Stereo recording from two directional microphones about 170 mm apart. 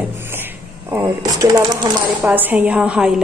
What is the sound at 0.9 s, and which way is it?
Speech, 20° right (ahead or behind).